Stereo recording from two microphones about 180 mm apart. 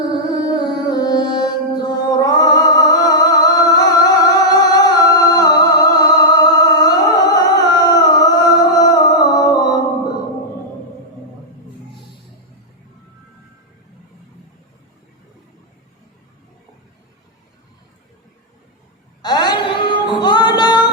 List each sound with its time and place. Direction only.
0.0 s music: 20° left (ahead or behind)
19.2 s female singing: 25° left (ahead or behind)